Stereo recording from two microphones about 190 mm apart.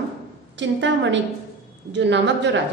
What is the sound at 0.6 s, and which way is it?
A woman's voice, 70° right (ahead or behind).